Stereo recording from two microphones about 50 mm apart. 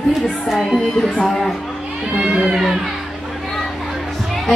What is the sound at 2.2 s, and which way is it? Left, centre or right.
Speech, centre.